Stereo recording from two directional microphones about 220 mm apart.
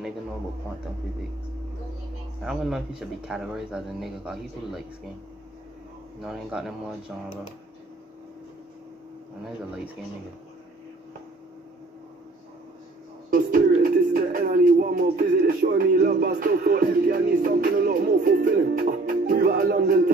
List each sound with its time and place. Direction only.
2.4 s speech: centre (ahead or behind)
6.2 s speech: centre (ahead or behind)
13.3 s speech: 40° right (ahead or behind)